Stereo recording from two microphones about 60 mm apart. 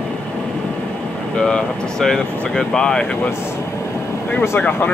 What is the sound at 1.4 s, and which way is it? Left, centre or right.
Speech, centre.